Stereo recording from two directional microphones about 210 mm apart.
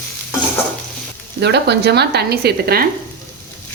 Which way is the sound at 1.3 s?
55° right (ahead or behind).